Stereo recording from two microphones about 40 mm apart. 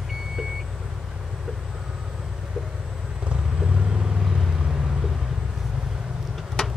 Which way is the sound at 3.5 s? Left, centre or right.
Right.